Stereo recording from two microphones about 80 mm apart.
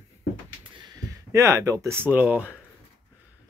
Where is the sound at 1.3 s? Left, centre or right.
Right.